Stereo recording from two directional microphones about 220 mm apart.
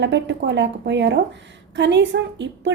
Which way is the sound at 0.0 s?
55° right (ahead or behind).